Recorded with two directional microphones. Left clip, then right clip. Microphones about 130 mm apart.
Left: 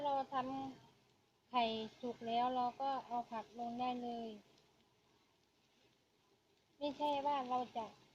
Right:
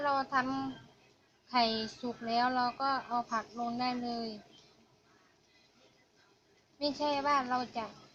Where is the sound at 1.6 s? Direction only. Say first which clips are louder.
Right 7 dB; 30° left (ahead or behind).